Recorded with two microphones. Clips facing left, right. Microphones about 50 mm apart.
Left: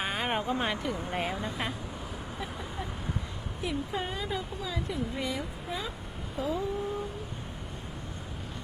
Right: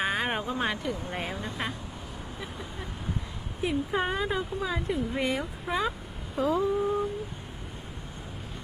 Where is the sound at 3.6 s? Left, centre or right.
Right.